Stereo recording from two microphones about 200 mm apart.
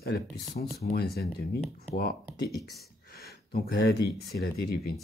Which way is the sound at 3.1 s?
50° left (ahead or behind).